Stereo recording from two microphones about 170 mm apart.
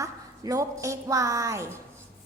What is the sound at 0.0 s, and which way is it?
A woman's voice, 20° right (ahead or behind).